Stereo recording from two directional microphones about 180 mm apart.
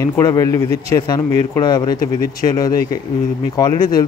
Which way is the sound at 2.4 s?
20° left (ahead or behind).